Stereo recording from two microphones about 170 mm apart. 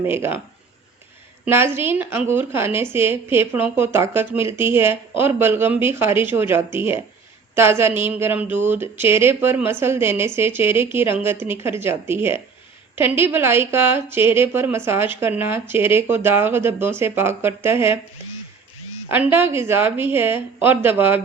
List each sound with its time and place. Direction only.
0.0 s a woman's voice: 15° right (ahead or behind)
1.5 s a woman's voice: 15° right (ahead or behind)
19.1 s a woman's voice: 10° right (ahead or behind)